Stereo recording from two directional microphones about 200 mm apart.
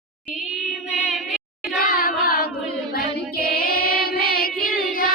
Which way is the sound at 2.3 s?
50° left (ahead or behind).